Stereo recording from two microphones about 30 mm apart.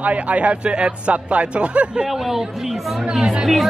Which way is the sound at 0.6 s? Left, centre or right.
Right.